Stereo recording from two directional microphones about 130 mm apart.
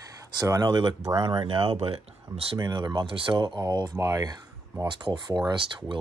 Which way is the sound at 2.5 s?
30° right (ahead or behind).